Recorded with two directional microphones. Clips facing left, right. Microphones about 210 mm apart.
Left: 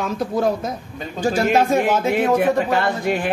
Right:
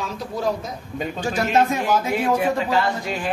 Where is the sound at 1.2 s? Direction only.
35° left (ahead or behind).